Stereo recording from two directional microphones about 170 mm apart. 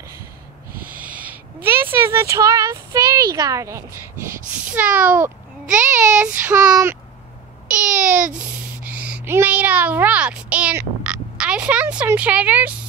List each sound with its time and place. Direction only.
0.9 s speech: 10° right (ahead or behind)
6.1 s child singing: 10° right (ahead or behind)
6.6 s speech: 20° right (ahead or behind)
7.7 s a child's voice: 5° right (ahead or behind)